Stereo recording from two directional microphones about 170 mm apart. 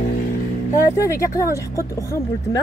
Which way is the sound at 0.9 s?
15° left (ahead or behind).